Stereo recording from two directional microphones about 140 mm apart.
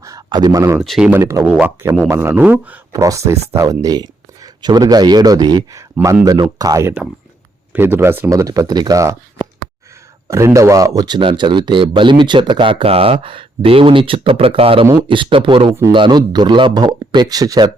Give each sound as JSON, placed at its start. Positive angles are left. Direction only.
{"t": 0.0, "sound": "a sound", "side_deg": -25}
{"t": 0.8, "sound": "speech", "side_deg": -5}
{"t": 1.1, "sound": "speech", "side_deg": -20}
{"t": 2.9, "sound": "speech", "side_deg": -25}
{"t": 10.2, "sound": "speech", "side_deg": -20}